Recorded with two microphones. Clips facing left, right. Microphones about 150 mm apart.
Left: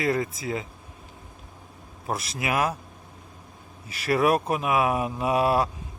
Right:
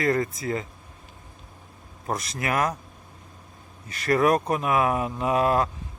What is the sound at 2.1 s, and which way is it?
Speech, 5° left (ahead or behind).